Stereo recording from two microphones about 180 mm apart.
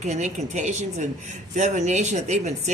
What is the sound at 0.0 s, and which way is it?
Speech, 40° right (ahead or behind).